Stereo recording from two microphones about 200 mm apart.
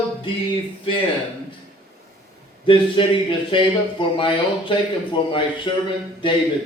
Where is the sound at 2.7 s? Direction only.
25° left (ahead or behind).